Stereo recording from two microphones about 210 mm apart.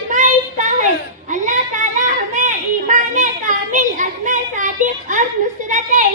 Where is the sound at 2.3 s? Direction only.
35° right (ahead or behind).